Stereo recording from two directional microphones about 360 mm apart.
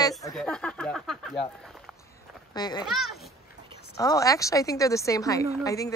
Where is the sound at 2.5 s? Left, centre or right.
Centre.